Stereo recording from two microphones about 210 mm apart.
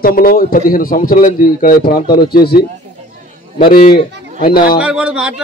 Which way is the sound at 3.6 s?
45° left (ahead or behind).